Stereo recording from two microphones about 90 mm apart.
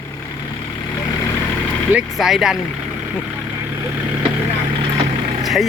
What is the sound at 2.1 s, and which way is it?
Speech, 5° right (ahead or behind).